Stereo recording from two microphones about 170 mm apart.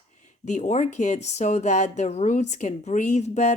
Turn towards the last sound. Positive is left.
turn(degrees=45)  # may be behind; listen again after turning